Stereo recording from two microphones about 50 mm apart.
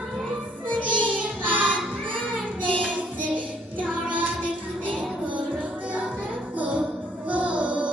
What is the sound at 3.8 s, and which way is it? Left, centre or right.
Music, right.